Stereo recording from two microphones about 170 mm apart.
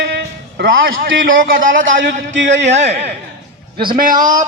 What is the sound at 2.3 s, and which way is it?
Speech, 90° right.